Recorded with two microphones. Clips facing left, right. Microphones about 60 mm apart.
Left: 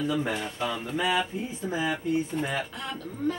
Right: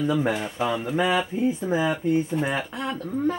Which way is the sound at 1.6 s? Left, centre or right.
Right.